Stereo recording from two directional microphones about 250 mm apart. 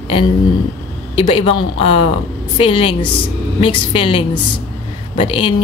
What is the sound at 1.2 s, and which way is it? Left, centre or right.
Speech, left.